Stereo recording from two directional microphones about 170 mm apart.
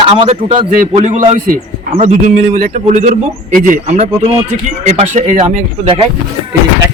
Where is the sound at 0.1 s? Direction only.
35° right (ahead or behind).